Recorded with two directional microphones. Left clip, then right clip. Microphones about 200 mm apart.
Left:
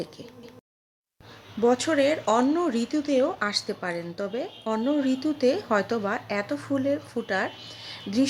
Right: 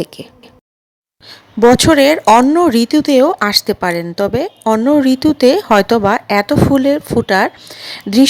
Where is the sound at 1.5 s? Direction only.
45° right (ahead or behind).